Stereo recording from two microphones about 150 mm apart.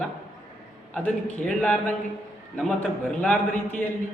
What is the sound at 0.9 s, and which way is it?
A man's voice, 10° left (ahead or behind).